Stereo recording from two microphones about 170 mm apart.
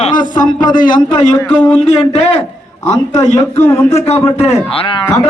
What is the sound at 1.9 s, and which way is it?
A man's voice, 40° left (ahead or behind).